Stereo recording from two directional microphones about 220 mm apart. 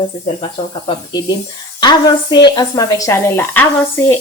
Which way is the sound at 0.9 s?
20° left (ahead or behind).